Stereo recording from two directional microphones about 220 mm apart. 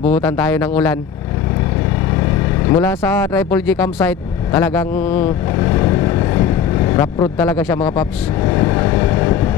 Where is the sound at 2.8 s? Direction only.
10° left (ahead or behind).